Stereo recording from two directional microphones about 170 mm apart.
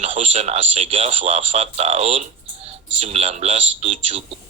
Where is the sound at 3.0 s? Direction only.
40° right (ahead or behind).